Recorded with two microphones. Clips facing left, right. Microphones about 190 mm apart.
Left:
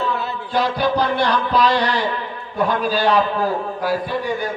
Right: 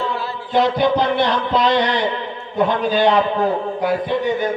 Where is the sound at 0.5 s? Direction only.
20° right (ahead or behind).